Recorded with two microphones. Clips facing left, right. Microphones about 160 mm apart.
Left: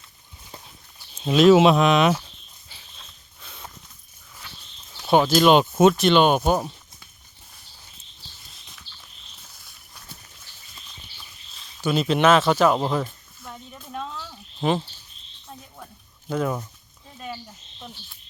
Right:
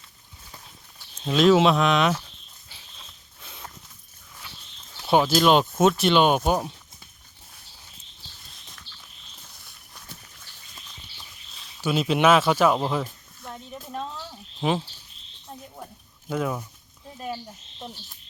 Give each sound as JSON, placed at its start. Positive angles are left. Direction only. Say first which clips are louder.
{"t": 0.9, "sound": "speech", "louder": "left 4 dB", "side_deg": 10}
{"t": 2.6, "sound": "dog", "louder": "even", "side_deg": 0}
{"t": 5.0, "sound": "speech", "louder": "left 2 dB", "side_deg": 0}
{"t": 11.5, "sound": "a sound", "louder": "left 2 dB", "side_deg": -5}
{"t": 13.9, "sound": "a sound", "louder": "left 1 dB", "side_deg": -30}
{"t": 14.6, "sound": "speech", "louder": "left 2 dB", "side_deg": -5}
{"t": 16.3, "sound": "speech", "louder": "left 2 dB", "side_deg": -5}